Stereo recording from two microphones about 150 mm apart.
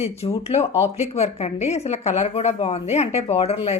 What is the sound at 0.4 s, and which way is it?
A woman's voice, 45° left (ahead or behind).